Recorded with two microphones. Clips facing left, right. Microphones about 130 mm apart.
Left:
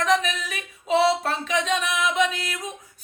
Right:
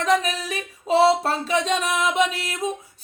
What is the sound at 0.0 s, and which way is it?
Singing, 35° right (ahead or behind).